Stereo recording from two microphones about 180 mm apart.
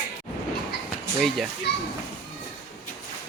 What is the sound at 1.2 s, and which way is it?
Speech, centre (ahead or behind).